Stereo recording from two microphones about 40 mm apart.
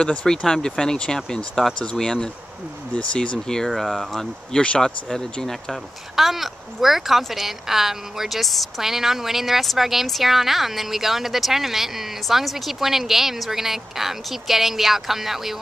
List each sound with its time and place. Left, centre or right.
0.0 s speech: left
3.4 s speech: centre
3.7 s speech: centre
4.5 s speech: left
6.1 s speech: centre